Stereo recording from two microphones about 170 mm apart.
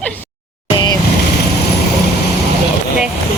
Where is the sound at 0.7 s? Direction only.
25° left (ahead or behind).